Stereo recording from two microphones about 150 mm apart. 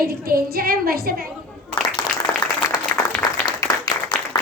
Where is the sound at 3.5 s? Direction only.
25° left (ahead or behind).